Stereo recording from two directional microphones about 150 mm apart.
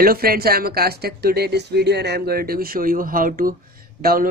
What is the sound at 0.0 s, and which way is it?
Speech, 85° right.